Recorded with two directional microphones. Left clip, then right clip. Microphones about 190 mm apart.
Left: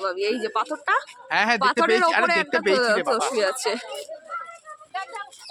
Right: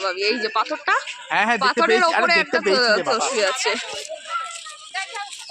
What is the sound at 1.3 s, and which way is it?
Speech, 10° right (ahead or behind).